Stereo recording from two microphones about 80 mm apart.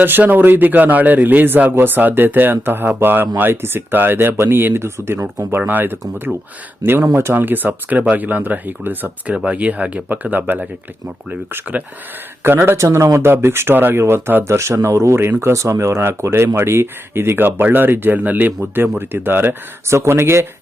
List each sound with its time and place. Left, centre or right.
0.0 s speech: right
11.7 s speech: centre
12.4 s speech: right